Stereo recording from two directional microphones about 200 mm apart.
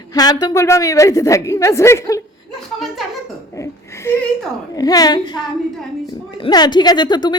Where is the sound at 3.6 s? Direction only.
15° left (ahead or behind).